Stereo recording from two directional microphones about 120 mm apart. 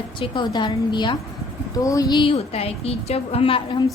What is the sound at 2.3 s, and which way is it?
A woman's voice, 55° left (ahead or behind).